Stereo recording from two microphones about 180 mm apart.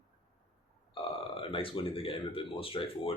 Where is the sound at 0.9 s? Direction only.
30° left (ahead or behind).